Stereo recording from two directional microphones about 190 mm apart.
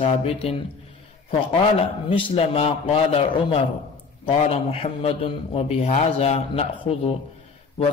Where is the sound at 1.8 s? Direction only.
25° left (ahead or behind).